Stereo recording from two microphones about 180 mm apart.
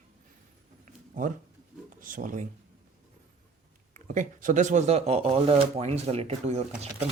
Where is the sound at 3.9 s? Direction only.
45° right (ahead or behind).